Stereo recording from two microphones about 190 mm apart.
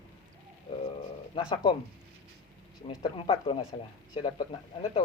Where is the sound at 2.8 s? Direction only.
30° left (ahead or behind).